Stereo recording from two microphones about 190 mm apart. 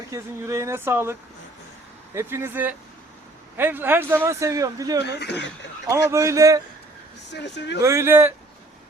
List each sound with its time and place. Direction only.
0.1 s speech: 15° right (ahead or behind)
2.1 s speech: 10° right (ahead or behind)
5.0 s speech: 60° left (ahead or behind)
6.1 s speech: 15° right (ahead or behind)
7.3 s speech: 65° left (ahead or behind)
7.8 s speech: 15° right (ahead or behind)